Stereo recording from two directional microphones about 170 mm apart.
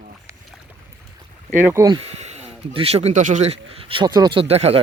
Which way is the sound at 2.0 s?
40° right (ahead or behind).